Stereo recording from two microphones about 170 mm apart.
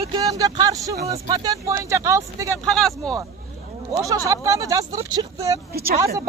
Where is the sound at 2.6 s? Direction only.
Centre (ahead or behind).